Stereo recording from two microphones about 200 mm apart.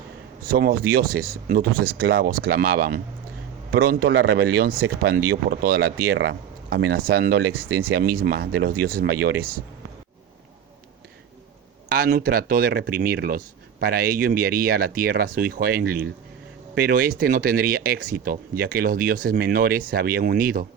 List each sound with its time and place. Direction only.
0.4 s speech: 45° right (ahead or behind)
11.9 s speech: 45° right (ahead or behind)